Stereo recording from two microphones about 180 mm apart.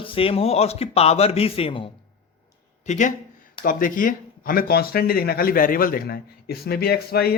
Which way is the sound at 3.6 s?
50° left (ahead or behind).